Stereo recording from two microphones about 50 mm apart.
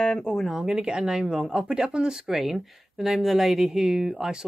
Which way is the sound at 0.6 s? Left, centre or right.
Centre.